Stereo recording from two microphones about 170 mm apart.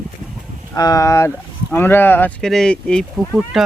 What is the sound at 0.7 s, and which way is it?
Speech, 20° left (ahead or behind).